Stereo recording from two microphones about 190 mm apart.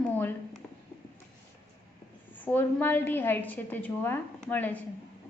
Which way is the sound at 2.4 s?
10° left (ahead or behind).